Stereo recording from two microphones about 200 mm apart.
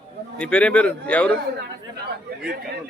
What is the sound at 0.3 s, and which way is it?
A man's voice, 5° left (ahead or behind).